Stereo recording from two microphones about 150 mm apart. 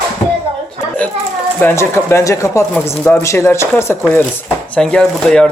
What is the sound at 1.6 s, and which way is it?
Speech, 15° left (ahead or behind).